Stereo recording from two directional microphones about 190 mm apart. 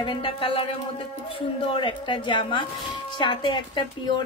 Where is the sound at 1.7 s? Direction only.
25° left (ahead or behind).